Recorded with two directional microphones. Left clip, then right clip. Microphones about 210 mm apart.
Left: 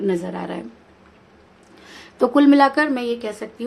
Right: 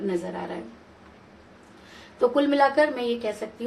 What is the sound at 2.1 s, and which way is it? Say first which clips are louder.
Speech: left 6 dB; 40° left (ahead or behind).